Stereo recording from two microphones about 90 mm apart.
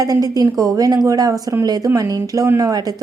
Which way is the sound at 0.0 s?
40° right (ahead or behind).